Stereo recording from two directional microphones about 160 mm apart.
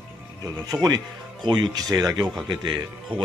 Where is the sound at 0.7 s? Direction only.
25° right (ahead or behind).